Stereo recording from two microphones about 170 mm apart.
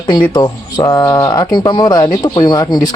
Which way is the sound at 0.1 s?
25° left (ahead or behind).